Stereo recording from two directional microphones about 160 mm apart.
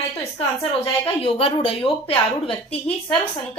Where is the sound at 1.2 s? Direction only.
35° left (ahead or behind).